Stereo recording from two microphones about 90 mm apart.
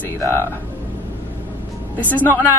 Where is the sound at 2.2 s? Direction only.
20° left (ahead or behind).